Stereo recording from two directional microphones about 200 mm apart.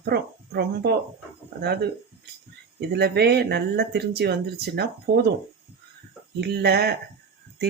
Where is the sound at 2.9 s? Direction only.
55° right (ahead or behind).